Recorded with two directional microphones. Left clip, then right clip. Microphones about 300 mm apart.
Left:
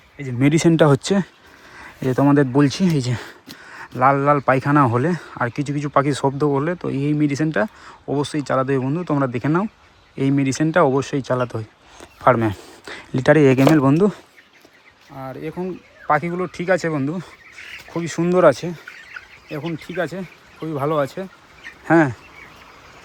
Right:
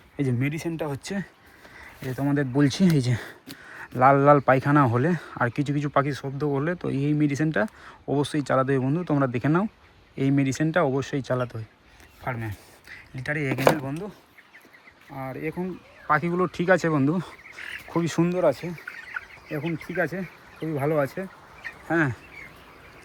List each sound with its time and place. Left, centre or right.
0.3 s speech: centre
12.3 s speech: left
12.8 s a sound: centre
13.2 s speech: centre
15.1 s speech: centre
18.3 s speech: left
19.5 s speech: centre
21.9 s speech: left